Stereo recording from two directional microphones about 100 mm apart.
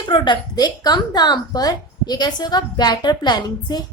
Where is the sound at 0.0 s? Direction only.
50° left (ahead or behind).